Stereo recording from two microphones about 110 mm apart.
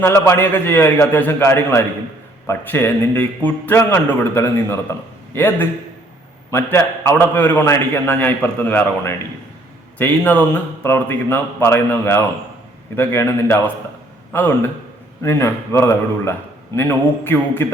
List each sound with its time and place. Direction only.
0.0 s a man's voice: 20° left (ahead or behind)
15.2 s a man's voice: 25° left (ahead or behind)